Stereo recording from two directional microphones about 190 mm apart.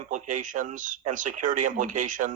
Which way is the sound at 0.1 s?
40° right (ahead or behind).